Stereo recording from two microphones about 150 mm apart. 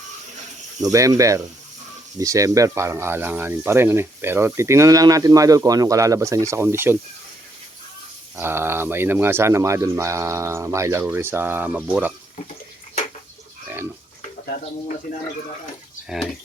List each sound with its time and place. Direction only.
0.8 s speech: 20° right (ahead or behind)
8.4 s speech: 15° right (ahead or behind)
16.0 s speech: centre (ahead or behind)